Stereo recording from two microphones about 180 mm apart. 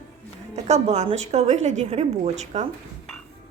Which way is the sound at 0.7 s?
35° right (ahead or behind).